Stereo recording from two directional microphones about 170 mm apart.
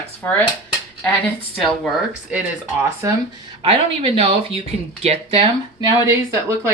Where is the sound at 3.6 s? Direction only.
35° right (ahead or behind).